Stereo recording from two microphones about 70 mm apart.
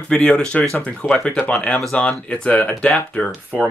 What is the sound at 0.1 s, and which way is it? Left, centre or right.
Speech, centre.